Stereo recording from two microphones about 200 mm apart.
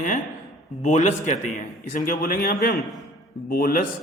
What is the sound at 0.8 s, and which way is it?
A man's voice, 35° left (ahead or behind).